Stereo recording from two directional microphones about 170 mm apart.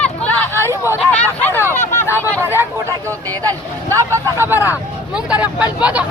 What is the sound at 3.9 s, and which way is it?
Speech, 20° right (ahead or behind).